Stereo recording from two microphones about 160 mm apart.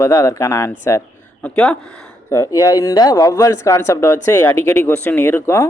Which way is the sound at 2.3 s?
20° left (ahead or behind).